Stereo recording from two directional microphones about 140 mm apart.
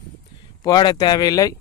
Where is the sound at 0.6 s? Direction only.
30° left (ahead or behind).